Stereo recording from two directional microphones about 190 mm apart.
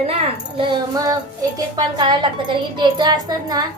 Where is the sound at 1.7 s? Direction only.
25° right (ahead or behind).